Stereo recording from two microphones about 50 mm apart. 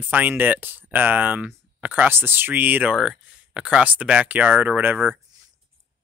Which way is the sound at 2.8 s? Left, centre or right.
Centre.